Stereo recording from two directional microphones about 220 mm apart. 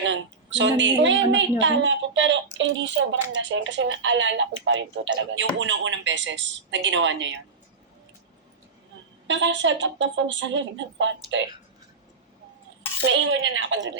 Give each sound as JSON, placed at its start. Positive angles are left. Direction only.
{"t": 0.0, "sound": "a woman's voice", "side_deg": -55}
{"t": 9.2, "sound": "a woman's voice", "side_deg": -55}
{"t": 13.1, "sound": "a woman's voice", "side_deg": -55}